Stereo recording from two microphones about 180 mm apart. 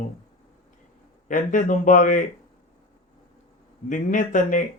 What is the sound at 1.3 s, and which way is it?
Speech, 45° left (ahead or behind).